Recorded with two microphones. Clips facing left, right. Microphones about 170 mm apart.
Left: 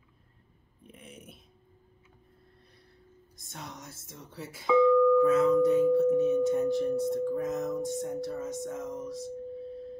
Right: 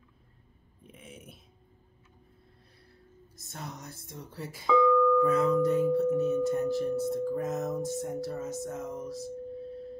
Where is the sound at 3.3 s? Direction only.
Centre (ahead or behind).